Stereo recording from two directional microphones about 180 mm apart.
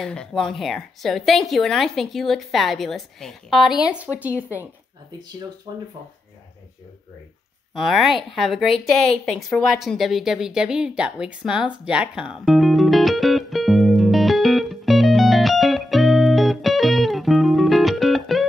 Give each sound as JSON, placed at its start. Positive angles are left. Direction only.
{"t": 0.0, "sound": "a woman's voice", "side_deg": 5}
{"t": 7.7, "sound": "a woman's voice", "side_deg": 0}
{"t": 8.8, "sound": "a sound", "side_deg": 5}